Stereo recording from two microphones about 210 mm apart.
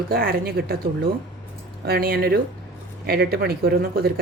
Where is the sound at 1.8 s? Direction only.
45° right (ahead or behind).